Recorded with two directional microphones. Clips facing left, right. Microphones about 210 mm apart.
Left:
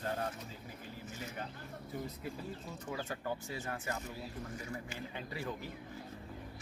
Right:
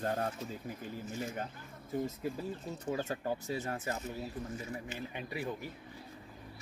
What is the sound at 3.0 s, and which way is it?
Speech, 40° right (ahead or behind).